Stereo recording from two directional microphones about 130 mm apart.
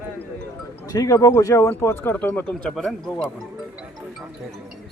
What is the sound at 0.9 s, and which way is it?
Speech, 30° left (ahead or behind).